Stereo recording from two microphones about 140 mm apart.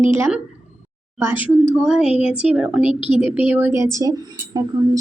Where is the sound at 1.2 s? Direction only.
15° right (ahead or behind).